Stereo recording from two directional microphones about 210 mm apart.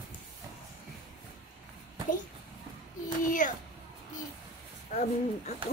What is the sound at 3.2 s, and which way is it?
Speech, 40° left (ahead or behind).